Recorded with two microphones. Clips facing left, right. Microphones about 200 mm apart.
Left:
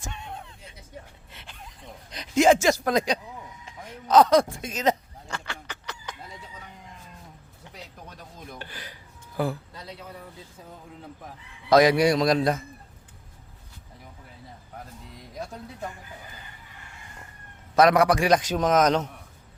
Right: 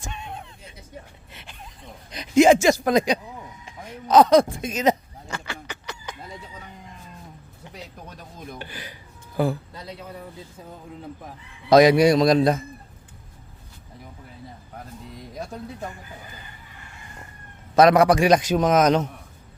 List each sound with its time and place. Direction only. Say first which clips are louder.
0.0 s a sound: right 2 dB; 15° right (ahead or behind)
2.0 s speech: right 4 dB; 10° right (ahead or behind)
3.7 s a sound: right 2 dB; 15° right (ahead or behind)
8.5 s a man's voice: right 3 dB; 10° right (ahead or behind)
11.7 s a man's voice: right 4 dB; 20° right (ahead or behind)
17.7 s a man's voice: right 4 dB; 25° right (ahead or behind); by 19.1 s 10° right (ahead or behind)